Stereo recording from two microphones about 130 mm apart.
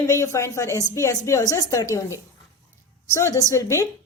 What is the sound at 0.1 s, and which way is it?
Speech, 25° left (ahead or behind).